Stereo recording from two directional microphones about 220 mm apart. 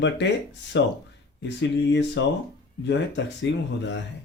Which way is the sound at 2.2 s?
55° left (ahead or behind).